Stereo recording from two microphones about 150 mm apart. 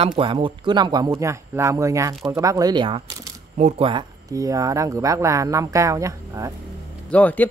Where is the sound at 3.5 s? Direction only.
50° right (ahead or behind).